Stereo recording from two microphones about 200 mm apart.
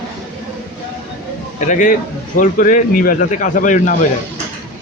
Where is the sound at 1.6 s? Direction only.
40° left (ahead or behind).